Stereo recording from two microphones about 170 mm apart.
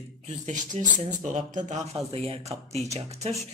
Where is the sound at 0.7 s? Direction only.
40° right (ahead or behind).